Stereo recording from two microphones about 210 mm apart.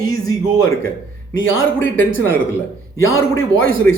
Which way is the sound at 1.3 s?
65° left (ahead or behind).